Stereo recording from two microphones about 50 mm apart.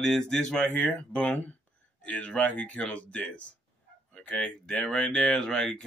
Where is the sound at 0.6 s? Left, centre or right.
Left.